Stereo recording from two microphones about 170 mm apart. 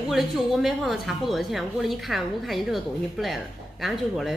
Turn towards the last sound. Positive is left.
turn(degrees=0)  # may be behind; listen again after turning